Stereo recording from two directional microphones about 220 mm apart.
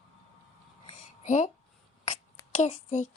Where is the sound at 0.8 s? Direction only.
30° left (ahead or behind).